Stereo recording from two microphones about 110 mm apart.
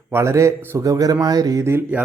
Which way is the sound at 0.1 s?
25° right (ahead or behind).